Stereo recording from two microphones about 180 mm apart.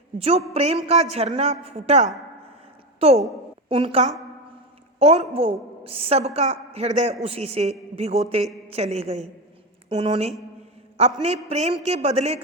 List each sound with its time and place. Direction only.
0.2 s a woman's voice: 35° right (ahead or behind)